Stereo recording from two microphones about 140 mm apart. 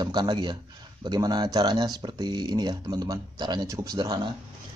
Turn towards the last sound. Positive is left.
turn(degrees=-30)  # may be behind; listen again after turning